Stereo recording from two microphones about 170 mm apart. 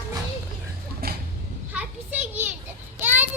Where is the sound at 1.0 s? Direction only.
60° right (ahead or behind).